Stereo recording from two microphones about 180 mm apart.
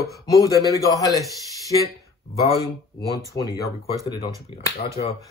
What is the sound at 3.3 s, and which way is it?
Speech, 20° left (ahead or behind).